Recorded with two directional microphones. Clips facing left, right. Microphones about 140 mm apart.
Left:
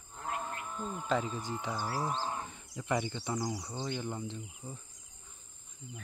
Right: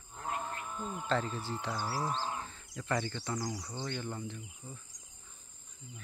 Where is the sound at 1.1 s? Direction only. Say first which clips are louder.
Left 1 dB; 10° left (ahead or behind).